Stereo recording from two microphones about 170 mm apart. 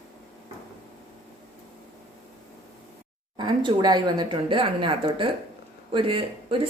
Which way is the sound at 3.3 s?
30° right (ahead or behind).